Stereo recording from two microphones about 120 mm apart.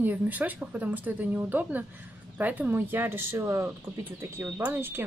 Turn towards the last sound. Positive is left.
turn(degrees=-20)  # may be behind; listen again after turning